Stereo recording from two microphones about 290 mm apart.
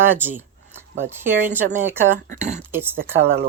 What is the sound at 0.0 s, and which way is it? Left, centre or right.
Speech, centre.